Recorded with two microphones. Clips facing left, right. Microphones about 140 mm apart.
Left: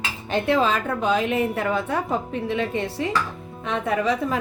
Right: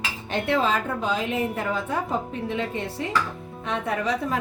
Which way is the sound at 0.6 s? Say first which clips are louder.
Left 3 dB; 70° left (ahead or behind).